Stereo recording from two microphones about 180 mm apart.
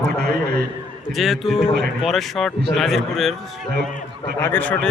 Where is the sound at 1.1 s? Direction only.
Centre (ahead or behind).